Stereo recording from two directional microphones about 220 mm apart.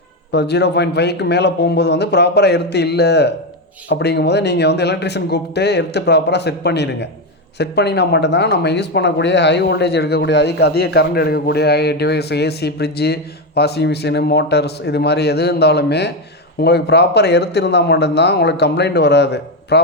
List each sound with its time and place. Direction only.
0.3 s speech: 50° left (ahead or behind)